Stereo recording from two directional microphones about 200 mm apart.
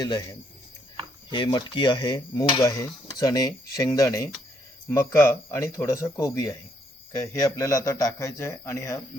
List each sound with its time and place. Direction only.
0.0 s a man's voice: 20° left (ahead or behind)